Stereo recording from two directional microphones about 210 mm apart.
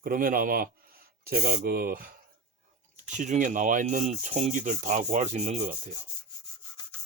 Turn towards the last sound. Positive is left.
turn(degrees=-35)  # may be behind; listen again after turning